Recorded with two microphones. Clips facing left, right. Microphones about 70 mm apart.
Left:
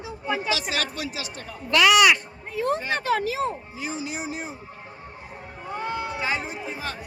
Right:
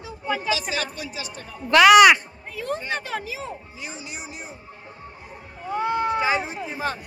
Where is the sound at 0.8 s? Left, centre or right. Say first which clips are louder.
Left 1 dB; left.